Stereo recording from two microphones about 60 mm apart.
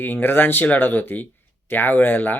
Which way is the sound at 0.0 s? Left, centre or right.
Left.